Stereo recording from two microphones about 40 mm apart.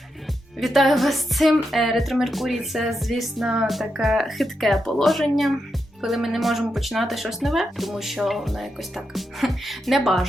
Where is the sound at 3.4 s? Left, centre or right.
Centre.